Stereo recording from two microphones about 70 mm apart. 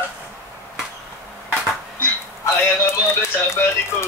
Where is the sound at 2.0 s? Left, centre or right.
Left.